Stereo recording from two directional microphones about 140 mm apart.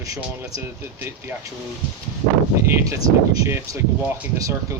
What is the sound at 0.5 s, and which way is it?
Speech, 15° right (ahead or behind).